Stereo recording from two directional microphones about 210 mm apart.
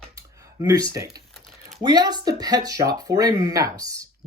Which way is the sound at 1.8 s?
20° right (ahead or behind).